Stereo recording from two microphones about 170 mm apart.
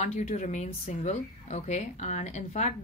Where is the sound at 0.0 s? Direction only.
45° left (ahead or behind).